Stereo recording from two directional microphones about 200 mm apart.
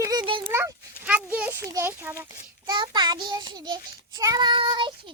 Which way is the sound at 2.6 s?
20° right (ahead or behind).